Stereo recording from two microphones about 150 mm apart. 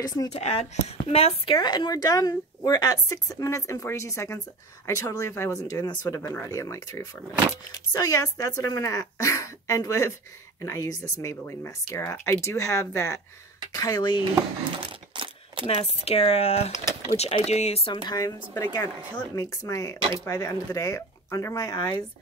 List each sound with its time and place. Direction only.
0.3 s speech: 45° left (ahead or behind)
14.8 s coin: 35° right (ahead or behind)
15.6 s speech: 40° left (ahead or behind)
18.0 s speech: 25° left (ahead or behind)